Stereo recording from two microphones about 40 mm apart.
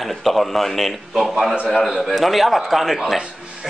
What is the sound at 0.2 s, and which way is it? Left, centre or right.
A man's voice, centre.